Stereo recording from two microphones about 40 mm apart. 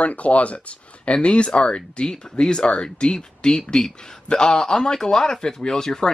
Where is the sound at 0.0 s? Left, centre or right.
Left.